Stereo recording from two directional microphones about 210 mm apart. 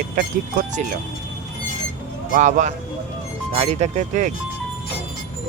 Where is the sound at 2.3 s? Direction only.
40° right (ahead or behind).